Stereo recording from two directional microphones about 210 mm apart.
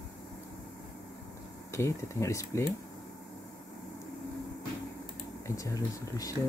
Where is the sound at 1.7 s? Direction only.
15° left (ahead or behind).